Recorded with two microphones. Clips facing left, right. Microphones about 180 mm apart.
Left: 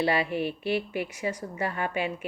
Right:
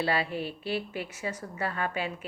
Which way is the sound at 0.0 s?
15° left (ahead or behind).